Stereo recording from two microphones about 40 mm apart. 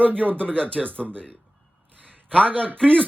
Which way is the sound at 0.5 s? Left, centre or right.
Left.